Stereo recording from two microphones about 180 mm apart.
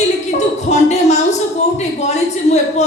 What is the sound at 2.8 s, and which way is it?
Speech, 40° left (ahead or behind).